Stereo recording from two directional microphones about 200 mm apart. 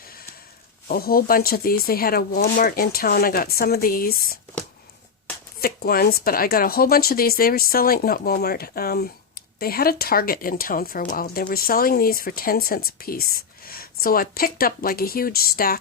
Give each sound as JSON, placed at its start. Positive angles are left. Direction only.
{"t": 0.9, "sound": "speech", "side_deg": 45}
{"t": 5.5, "sound": "speech", "side_deg": 50}